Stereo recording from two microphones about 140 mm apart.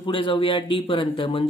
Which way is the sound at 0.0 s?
40° left (ahead or behind).